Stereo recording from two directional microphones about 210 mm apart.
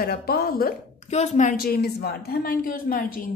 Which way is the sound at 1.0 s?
30° left (ahead or behind).